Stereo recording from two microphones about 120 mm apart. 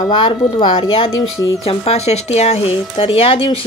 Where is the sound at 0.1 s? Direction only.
40° left (ahead or behind).